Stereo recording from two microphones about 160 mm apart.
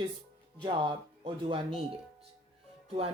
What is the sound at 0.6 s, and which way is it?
Speech, 30° right (ahead or behind).